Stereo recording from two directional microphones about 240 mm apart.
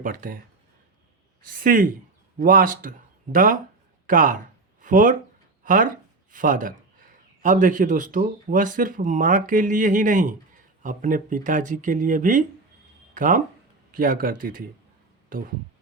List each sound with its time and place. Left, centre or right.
0.0 s speech: right
1.5 s speech: right